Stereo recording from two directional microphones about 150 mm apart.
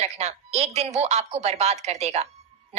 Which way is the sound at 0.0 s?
45° right (ahead or behind).